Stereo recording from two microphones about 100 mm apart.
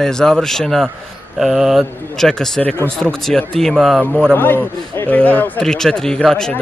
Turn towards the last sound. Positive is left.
turn(degrees=5)  # may be behind; listen again after turning